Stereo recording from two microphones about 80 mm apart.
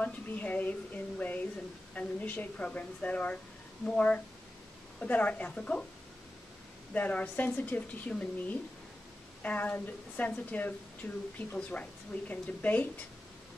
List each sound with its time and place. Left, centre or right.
0.0 s a woman's voice: centre
6.9 s a woman's voice: centre